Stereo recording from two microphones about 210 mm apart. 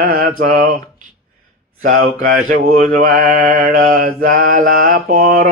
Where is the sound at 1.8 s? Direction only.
40° right (ahead or behind).